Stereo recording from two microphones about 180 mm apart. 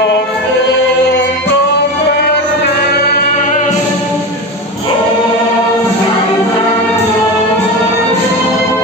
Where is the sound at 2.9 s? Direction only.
45° left (ahead or behind).